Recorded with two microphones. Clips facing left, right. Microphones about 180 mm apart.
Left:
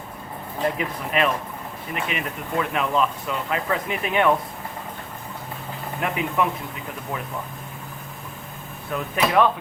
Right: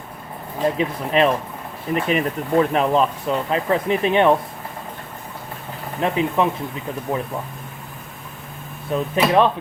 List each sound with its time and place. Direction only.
0.8 s speech: 30° right (ahead or behind)
6.0 s speech: 25° right (ahead or behind)
8.9 s speech: 25° right (ahead or behind)